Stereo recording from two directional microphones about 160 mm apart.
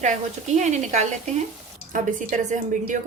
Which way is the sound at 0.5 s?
50° right (ahead or behind).